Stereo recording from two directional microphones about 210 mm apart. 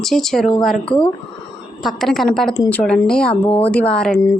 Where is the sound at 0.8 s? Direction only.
25° left (ahead or behind).